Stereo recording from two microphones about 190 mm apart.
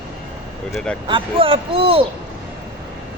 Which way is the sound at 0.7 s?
5° left (ahead or behind).